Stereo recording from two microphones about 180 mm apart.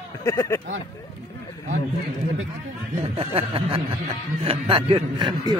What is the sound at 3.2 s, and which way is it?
A man's voice, 30° right (ahead or behind).